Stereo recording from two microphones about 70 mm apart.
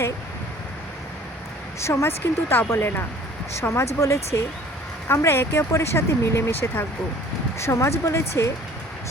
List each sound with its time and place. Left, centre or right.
1.8 s speech: left